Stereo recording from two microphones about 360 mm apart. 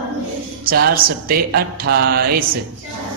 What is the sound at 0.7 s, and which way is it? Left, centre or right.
Music, right.